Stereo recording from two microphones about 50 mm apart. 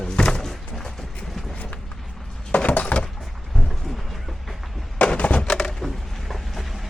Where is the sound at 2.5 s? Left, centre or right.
Left.